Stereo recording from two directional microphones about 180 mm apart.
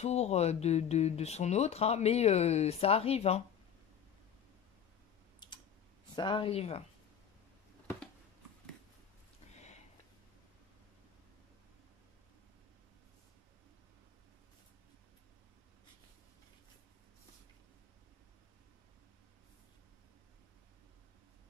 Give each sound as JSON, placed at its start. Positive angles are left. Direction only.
{"t": 0.0, "sound": "speech", "side_deg": 35}
{"t": 6.1, "sound": "speech", "side_deg": 25}
{"t": 9.5, "sound": "a sound", "side_deg": 40}